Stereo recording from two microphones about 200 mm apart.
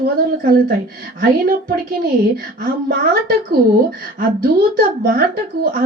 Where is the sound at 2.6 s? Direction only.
45° right (ahead or behind).